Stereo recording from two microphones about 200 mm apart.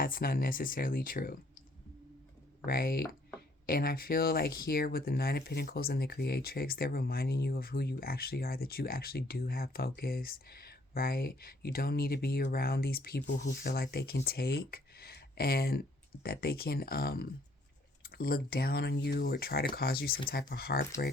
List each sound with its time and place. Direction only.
0.0 s speech: 45° left (ahead or behind)
2.6 s speech: 50° left (ahead or behind)